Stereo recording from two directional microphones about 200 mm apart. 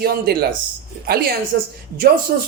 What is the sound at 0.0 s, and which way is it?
Speech, 50° right (ahead or behind).